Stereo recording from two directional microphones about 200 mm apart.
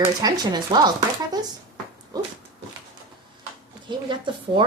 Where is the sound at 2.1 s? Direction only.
20° right (ahead or behind).